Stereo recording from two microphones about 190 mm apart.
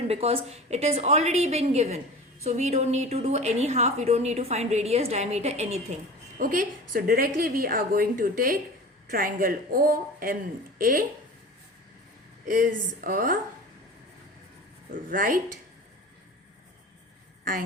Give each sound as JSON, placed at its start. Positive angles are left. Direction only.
{"t": 0.1, "sound": "a woman's voice", "side_deg": -30}
{"t": 6.4, "sound": "a woman's voice", "side_deg": -45}
{"t": 12.5, "sound": "a woman's voice", "side_deg": -45}
{"t": 14.9, "sound": "a woman's voice", "side_deg": -45}